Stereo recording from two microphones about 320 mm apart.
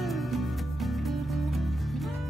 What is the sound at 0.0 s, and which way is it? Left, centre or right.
Music, centre.